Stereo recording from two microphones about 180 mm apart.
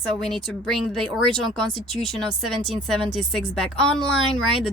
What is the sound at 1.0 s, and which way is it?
Speech, 25° right (ahead or behind).